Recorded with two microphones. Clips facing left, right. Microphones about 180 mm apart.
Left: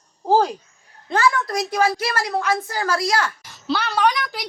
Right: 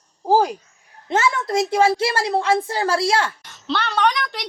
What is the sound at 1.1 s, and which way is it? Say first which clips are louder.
A woman's voice: even; 25° right (ahead or behind).